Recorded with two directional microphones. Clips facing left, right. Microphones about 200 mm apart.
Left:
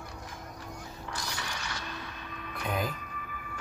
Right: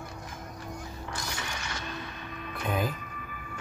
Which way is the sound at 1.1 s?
50° right (ahead or behind).